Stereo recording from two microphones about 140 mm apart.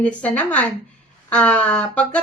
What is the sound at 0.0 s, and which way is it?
Speech, 10° left (ahead or behind).